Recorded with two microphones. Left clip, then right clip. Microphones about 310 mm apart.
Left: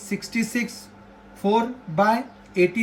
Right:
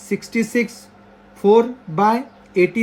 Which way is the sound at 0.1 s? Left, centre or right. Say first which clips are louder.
Right 6 dB; centre.